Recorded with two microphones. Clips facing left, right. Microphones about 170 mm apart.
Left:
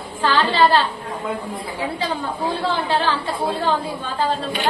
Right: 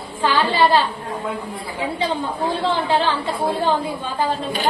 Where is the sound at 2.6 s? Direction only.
20° right (ahead or behind).